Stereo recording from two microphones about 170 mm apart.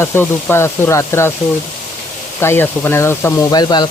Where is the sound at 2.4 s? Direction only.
10° left (ahead or behind).